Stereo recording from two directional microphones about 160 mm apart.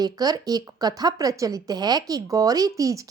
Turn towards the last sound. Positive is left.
turn(degrees=-20)  # may be behind; listen again after turning